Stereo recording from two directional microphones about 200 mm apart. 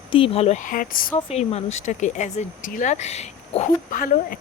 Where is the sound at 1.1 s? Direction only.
30° left (ahead or behind).